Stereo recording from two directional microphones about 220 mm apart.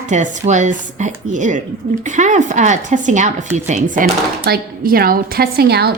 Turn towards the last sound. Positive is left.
turn(degrees=-45)  # may be behind; listen again after turning